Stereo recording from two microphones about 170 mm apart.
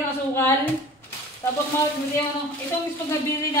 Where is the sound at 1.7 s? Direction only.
10° left (ahead or behind).